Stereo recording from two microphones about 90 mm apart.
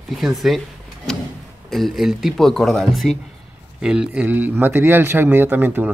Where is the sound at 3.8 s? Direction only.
10° right (ahead or behind).